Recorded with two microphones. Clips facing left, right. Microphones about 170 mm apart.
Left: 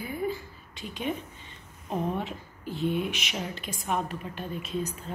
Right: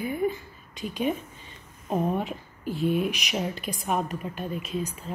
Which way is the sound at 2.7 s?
20° left (ahead or behind).